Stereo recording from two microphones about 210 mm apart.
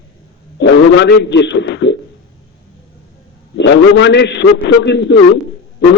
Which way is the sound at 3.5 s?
55° left (ahead or behind).